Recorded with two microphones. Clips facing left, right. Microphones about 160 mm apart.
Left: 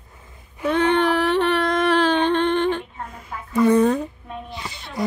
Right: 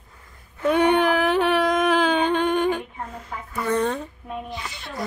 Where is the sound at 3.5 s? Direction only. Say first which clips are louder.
Left 8 dB; 20° left (ahead or behind).